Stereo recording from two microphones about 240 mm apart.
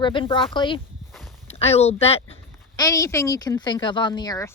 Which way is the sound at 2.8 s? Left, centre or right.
Centre.